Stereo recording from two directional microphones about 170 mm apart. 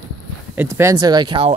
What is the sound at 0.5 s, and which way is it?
Speech, 15° right (ahead or behind).